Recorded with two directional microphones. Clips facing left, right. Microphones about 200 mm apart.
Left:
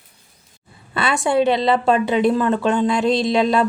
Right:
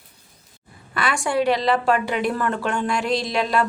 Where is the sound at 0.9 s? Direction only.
25° left (ahead or behind).